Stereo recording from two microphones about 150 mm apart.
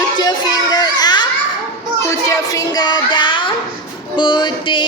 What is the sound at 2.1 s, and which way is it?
Speech, 25° left (ahead or behind).